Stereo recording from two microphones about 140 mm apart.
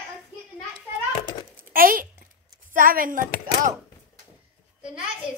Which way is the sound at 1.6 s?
90° right.